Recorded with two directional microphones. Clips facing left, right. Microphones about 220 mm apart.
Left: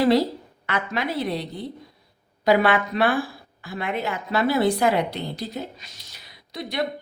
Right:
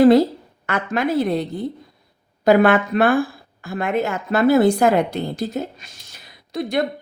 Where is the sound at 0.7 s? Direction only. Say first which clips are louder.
Right 6 dB; 50° right (ahead or behind).